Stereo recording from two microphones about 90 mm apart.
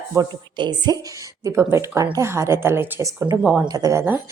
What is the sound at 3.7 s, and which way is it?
Speech, 40° right (ahead or behind).